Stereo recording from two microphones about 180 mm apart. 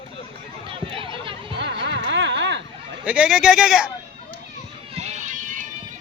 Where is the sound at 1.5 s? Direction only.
75° right (ahead or behind).